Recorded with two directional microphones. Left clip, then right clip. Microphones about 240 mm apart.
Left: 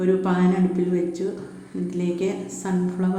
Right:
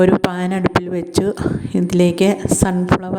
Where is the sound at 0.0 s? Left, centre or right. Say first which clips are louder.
Right 7 dB; right.